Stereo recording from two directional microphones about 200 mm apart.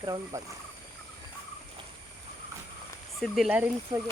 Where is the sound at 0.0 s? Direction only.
20° right (ahead or behind).